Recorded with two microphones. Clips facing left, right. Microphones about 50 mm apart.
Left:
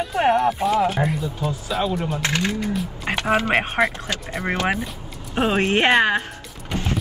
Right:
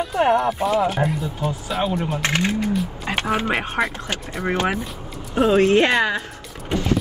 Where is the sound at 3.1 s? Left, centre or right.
Left.